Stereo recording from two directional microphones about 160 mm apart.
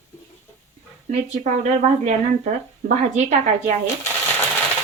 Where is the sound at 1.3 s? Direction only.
45° right (ahead or behind).